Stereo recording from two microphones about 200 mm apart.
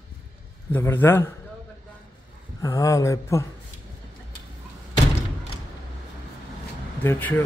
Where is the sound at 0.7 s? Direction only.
10° left (ahead or behind).